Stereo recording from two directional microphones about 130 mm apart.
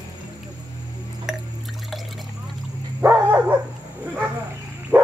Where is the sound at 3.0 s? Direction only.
15° right (ahead or behind).